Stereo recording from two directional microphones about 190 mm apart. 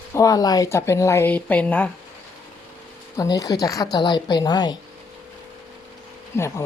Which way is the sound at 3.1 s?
20° left (ahead or behind).